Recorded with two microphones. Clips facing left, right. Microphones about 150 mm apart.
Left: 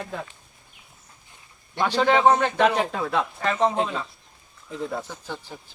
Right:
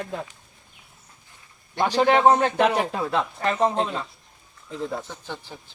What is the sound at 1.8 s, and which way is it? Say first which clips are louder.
A man's voice: right 1 dB; 10° right (ahead or behind).